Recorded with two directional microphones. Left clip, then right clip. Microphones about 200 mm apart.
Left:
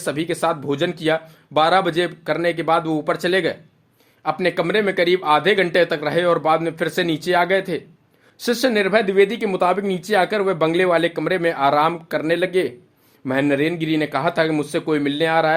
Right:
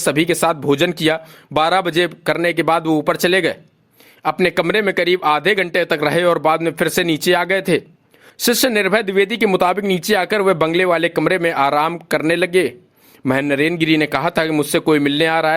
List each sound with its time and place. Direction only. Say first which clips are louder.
0.0 s speech: right 5 dB; 40° right (ahead or behind)